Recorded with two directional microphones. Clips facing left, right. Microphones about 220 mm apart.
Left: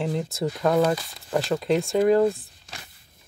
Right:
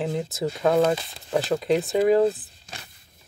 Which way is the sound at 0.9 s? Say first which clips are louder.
Right 1 dB; 25° right (ahead or behind).